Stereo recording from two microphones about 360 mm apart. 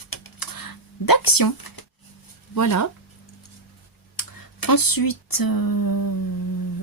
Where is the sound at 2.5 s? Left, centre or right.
Left.